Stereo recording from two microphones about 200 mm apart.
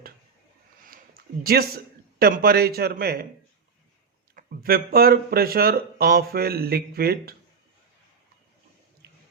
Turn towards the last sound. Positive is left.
turn(degrees=-50)  # may be behind; listen again after turning